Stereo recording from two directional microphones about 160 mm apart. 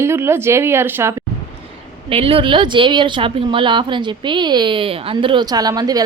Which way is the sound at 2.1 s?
35° right (ahead or behind).